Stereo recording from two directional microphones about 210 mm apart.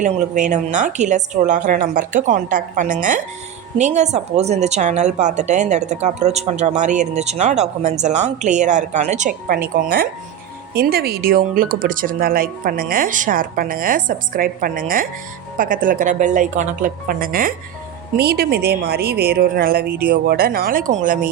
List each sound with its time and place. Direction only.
0.0 s a woman's voice: 35° right (ahead or behind)